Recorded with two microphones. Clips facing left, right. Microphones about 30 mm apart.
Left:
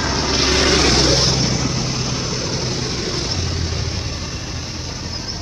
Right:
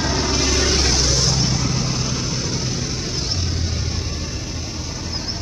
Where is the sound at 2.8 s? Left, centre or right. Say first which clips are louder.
Left 3 dB; left.